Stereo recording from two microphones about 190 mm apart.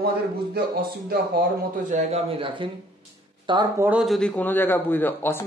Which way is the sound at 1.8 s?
35° right (ahead or behind).